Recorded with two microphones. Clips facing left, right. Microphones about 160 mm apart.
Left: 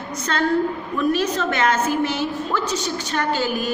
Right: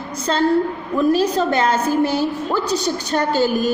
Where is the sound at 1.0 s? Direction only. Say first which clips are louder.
Right 5 dB; 35° right (ahead or behind).